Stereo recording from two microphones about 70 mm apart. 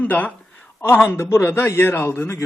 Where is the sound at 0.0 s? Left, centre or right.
Left.